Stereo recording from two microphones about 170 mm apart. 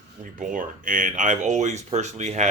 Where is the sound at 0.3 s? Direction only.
50° right (ahead or behind).